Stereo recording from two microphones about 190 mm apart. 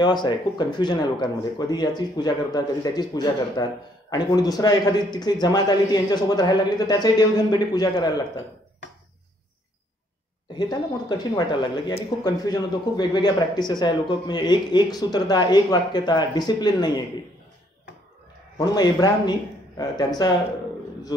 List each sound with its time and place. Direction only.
0.0 s speech: 25° left (ahead or behind)
10.5 s speech: 20° left (ahead or behind)
18.6 s speech: 20° left (ahead or behind)